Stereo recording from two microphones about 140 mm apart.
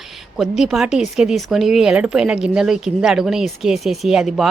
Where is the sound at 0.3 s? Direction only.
Centre (ahead or behind).